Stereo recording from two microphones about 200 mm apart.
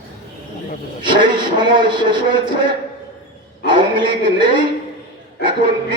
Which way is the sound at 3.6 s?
25° right (ahead or behind).